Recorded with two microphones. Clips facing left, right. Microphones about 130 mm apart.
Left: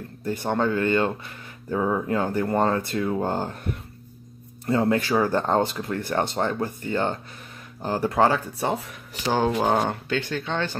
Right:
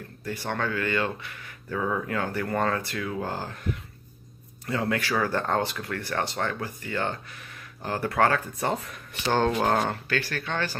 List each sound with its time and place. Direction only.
0.2 s speech: 20° left (ahead or behind)
4.6 s speech: 25° left (ahead or behind)
8.5 s speech: 5° left (ahead or behind)
10.0 s speech: 20° left (ahead or behind)